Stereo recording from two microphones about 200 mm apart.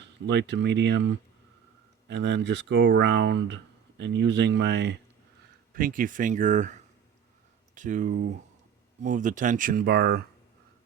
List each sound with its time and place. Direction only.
0.3 s speech: 60° right (ahead or behind)
5.7 s speech: 45° right (ahead or behind)
7.8 s speech: 40° right (ahead or behind)